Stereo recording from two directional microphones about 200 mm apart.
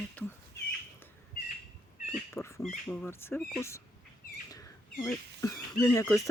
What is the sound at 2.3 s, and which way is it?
Speech, 15° left (ahead or behind).